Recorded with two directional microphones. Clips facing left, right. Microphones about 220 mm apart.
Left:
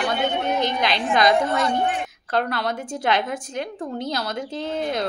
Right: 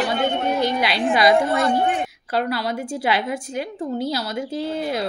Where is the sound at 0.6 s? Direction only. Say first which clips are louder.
Right 2 dB; 10° right (ahead or behind).